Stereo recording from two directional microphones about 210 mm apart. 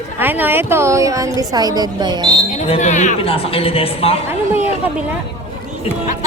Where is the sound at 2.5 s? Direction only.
35° left (ahead or behind).